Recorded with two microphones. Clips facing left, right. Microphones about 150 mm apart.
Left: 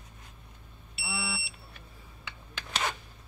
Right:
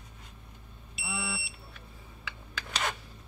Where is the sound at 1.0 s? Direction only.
5° left (ahead or behind).